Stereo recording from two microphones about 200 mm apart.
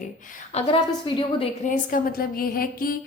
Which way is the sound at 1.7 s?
45° left (ahead or behind).